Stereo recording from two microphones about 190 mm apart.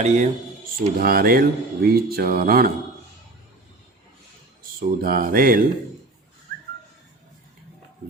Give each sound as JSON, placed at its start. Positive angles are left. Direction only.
{"t": 0.0, "sound": "speech", "side_deg": -35}
{"t": 0.9, "sound": "speech", "side_deg": -50}
{"t": 4.6, "sound": "speech", "side_deg": -50}